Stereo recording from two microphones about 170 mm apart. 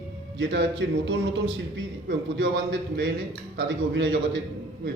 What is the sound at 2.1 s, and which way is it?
A man's voice, 90° right.